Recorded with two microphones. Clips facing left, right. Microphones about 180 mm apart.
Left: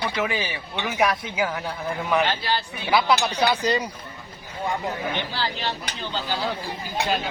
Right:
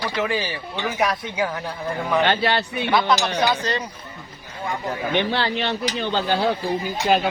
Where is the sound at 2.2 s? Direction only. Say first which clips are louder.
Right 5 dB; 70° right (ahead or behind).